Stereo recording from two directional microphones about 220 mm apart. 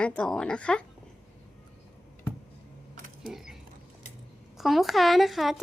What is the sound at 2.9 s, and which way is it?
Typewriter, 35° right (ahead or behind).